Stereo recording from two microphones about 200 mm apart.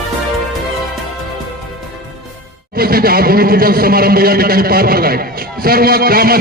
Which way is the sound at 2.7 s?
50° right (ahead or behind).